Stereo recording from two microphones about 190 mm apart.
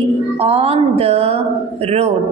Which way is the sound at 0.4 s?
30° right (ahead or behind).